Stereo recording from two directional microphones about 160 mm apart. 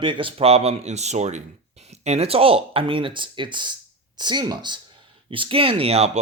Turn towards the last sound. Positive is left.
turn(degrees=-40)  # may be behind; listen again after turning